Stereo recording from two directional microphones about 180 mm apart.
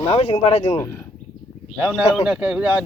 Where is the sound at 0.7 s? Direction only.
15° left (ahead or behind).